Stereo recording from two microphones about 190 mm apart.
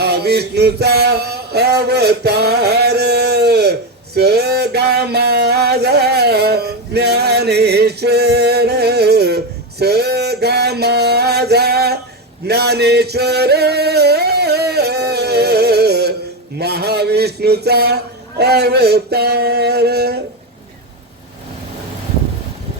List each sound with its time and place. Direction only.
0.0 s a sound: 60° right (ahead or behind)
12.5 s music: 60° right (ahead or behind)
16.6 s a man's voice: 60° right (ahead or behind)